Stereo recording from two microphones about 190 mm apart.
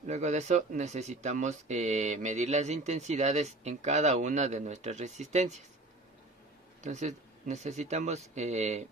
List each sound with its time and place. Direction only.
0.0 s speech: 40° right (ahead or behind)
6.8 s speech: 40° right (ahead or behind)